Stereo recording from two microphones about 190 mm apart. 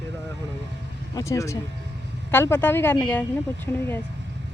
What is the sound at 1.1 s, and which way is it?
Speech, 15° left (ahead or behind).